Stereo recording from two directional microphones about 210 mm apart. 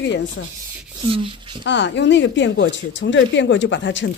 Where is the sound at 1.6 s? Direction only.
60° left (ahead or behind).